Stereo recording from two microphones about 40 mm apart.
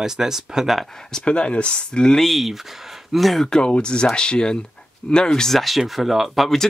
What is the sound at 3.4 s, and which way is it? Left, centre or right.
Speech, centre.